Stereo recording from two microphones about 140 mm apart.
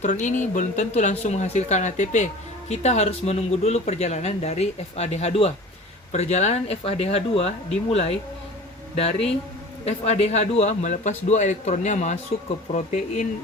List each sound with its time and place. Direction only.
0.0 s a man's voice: 60° left (ahead or behind)